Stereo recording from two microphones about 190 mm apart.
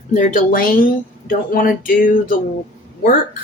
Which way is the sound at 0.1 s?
45° left (ahead or behind).